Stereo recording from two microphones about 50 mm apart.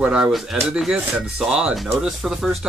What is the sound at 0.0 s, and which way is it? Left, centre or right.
Speech, right.